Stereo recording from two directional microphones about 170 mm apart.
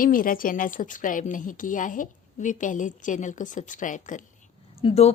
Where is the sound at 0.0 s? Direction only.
55° left (ahead or behind).